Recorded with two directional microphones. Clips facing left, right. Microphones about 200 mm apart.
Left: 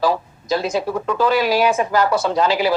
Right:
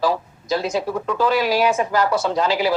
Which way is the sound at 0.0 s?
65° left (ahead or behind).